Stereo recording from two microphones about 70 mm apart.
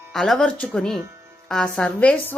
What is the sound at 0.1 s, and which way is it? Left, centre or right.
A woman's voice, centre.